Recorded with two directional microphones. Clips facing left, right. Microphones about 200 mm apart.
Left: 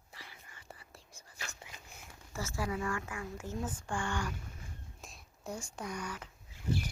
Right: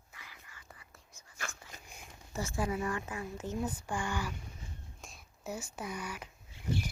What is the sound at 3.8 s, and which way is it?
Speech, 5° right (ahead or behind).